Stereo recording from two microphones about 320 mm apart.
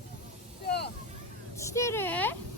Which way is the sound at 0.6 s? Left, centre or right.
Left.